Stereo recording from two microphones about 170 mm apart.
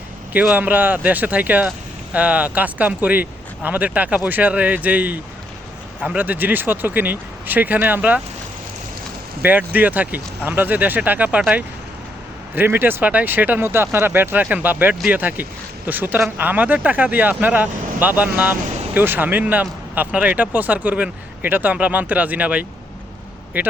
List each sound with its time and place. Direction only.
0.3 s speech: 10° right (ahead or behind)
9.4 s speech: 10° right (ahead or behind)